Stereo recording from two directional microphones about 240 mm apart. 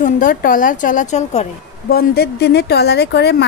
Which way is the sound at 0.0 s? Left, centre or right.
Left.